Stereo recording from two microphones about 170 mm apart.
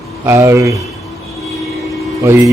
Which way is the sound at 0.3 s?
15° right (ahead or behind).